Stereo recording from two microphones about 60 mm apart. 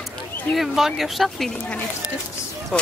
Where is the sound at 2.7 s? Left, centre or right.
Centre.